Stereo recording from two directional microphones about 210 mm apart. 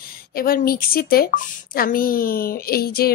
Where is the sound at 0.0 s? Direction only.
45° left (ahead or behind).